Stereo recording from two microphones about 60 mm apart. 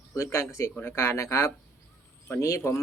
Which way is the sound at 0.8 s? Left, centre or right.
Left.